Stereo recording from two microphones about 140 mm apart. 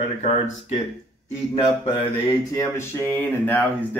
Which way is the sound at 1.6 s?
35° left (ahead or behind).